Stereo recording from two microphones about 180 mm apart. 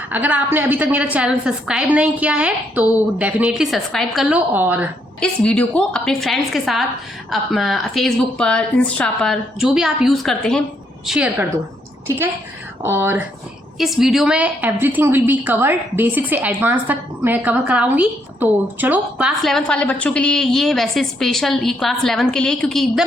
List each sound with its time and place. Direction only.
0.1 s a woman's voice: 10° right (ahead or behind)
5.2 s a woman's voice: 5° left (ahead or behind); by 13.2 s 10° right (ahead or behind)
13.7 s a woman's voice: centre (ahead or behind)
19.5 s a woman's voice: 5° left (ahead or behind)